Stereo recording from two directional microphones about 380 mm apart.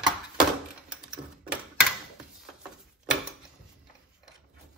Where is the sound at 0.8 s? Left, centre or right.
Centre.